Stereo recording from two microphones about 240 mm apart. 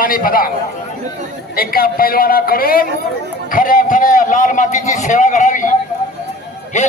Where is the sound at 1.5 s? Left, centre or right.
Left.